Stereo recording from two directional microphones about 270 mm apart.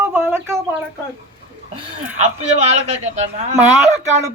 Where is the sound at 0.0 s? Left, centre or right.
Centre.